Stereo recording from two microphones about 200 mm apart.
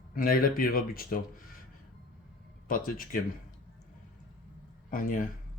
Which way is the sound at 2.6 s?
45° left (ahead or behind).